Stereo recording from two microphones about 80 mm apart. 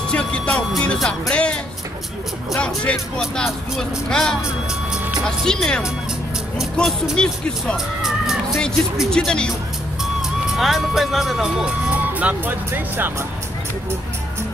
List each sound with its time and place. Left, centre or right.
0.1 s music: centre
0.9 s speech: centre
1.3 s music: centre
2.6 s music: centre
3.2 s speech: centre
7.7 s cat: centre
9.1 s music: centre
10.5 s speech: centre; by 13.1 s right